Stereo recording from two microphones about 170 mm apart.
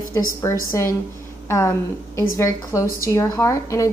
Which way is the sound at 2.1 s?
15° left (ahead or behind).